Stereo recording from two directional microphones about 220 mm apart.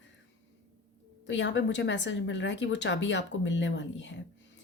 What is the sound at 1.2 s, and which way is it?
Speech, 55° left (ahead or behind).